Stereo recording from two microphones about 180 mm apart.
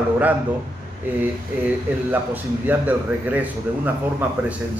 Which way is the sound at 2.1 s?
10° right (ahead or behind).